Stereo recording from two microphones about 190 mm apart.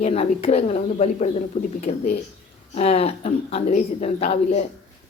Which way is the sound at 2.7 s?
30° left (ahead or behind).